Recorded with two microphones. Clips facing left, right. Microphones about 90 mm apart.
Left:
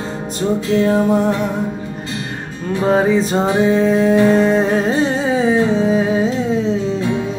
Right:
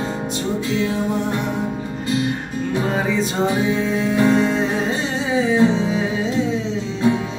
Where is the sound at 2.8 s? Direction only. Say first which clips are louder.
Left 11 dB; 35° left (ahead or behind).